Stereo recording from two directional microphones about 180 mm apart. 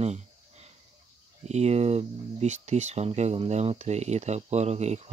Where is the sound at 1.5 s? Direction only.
35° right (ahead or behind).